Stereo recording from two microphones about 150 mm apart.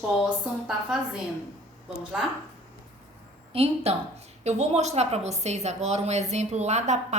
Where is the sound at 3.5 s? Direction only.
40° right (ahead or behind).